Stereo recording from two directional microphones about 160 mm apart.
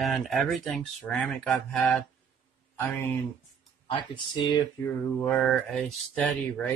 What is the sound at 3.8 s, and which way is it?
Speech, 30° left (ahead or behind).